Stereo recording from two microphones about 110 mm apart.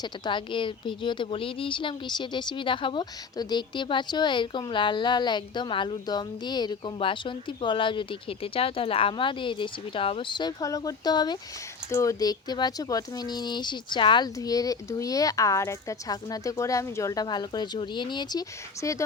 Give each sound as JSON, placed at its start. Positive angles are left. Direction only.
{"t": 0.0, "sound": "speech", "side_deg": 45}
{"t": 10.6, "sound": "speech", "side_deg": 30}
{"t": 11.9, "sound": "speech", "side_deg": 25}
{"t": 14.3, "sound": "speech", "side_deg": 35}